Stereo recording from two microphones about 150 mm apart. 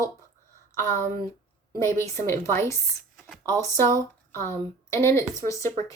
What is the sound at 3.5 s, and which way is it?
A woman's voice, 20° left (ahead or behind).